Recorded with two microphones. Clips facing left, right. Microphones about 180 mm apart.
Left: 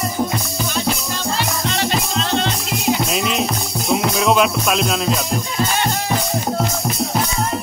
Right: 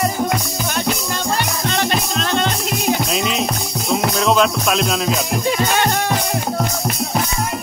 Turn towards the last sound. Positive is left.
turn(degrees=-60)  # may be behind; listen again after turning